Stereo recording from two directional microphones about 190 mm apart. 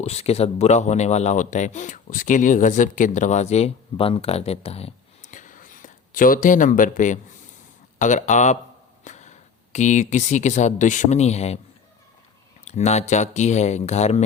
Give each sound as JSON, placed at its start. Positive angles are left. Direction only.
{"t": 0.0, "sound": "speech", "side_deg": 35}
{"t": 12.6, "sound": "speech", "side_deg": 35}